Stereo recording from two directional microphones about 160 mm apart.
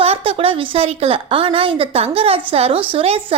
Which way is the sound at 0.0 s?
35° right (ahead or behind).